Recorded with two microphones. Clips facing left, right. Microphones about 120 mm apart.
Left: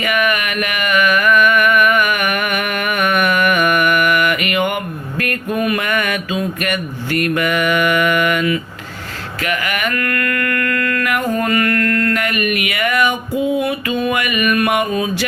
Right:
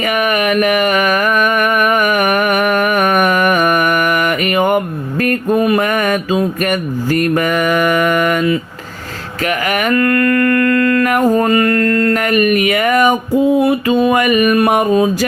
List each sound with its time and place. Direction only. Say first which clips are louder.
0.0 s a sound: right 3 dB; 40° right (ahead or behind)
5.2 s mantra: right 6 dB; 35° right (ahead or behind)
9.5 s music: right 4 dB; 40° right (ahead or behind)
9.9 s mantra: right 8 dB; 30° right (ahead or behind)